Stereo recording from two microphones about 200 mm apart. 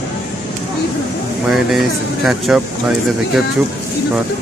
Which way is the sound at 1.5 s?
Centre (ahead or behind).